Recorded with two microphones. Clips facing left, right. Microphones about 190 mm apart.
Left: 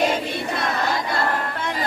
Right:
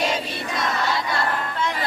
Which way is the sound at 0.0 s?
55° left (ahead or behind).